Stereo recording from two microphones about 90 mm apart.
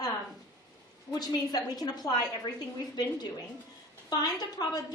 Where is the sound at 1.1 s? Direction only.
45° left (ahead or behind).